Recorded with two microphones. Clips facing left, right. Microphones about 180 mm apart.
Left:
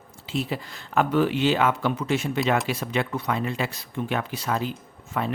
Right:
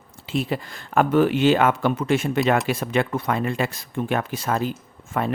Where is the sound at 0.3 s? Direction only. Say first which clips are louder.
Right 3 dB; 55° right (ahead or behind).